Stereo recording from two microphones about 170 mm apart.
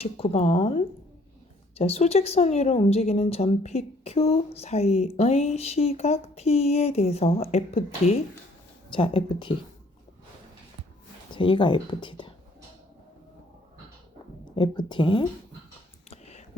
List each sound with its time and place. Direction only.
0.0 s a woman's voice: 35° left (ahead or behind)
1.8 s a woman's voice: 40° left (ahead or behind)
11.3 s speech: 30° left (ahead or behind)
14.5 s speech: 25° left (ahead or behind)